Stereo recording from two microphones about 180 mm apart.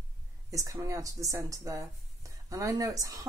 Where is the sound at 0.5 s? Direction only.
15° right (ahead or behind).